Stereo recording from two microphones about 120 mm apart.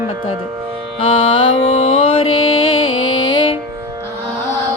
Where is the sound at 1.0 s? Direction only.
45° left (ahead or behind).